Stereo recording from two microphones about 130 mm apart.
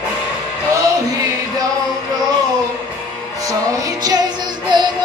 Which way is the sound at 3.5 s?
30° right (ahead or behind).